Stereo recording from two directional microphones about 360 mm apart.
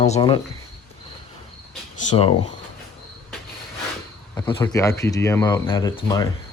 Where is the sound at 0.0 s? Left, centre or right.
Centre.